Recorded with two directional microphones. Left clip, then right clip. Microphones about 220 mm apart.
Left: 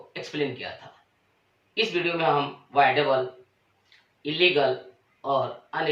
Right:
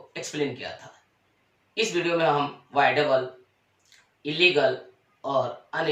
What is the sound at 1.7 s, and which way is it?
Speech, centre (ahead or behind).